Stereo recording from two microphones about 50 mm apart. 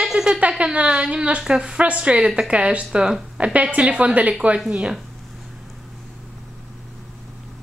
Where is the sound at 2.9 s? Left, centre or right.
Centre.